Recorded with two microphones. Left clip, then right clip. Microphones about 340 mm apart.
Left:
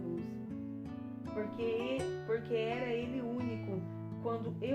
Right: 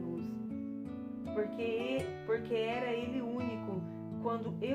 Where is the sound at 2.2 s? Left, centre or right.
Centre.